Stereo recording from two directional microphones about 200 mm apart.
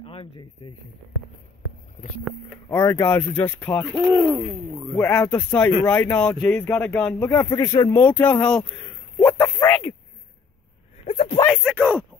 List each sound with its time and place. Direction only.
0.0 s a sound: 30° left (ahead or behind)
2.2 s speech: 10° left (ahead or behind)
4.0 s speech: 15° right (ahead or behind)
4.9 s speech: 10° left (ahead or behind)
11.1 s speech: 30° left (ahead or behind)
11.5 s speech: 5° right (ahead or behind)